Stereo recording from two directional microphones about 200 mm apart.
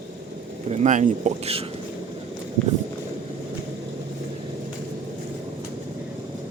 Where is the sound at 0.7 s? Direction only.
35° right (ahead or behind).